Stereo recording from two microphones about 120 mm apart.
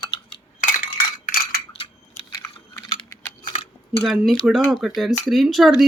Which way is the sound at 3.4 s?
50° left (ahead or behind).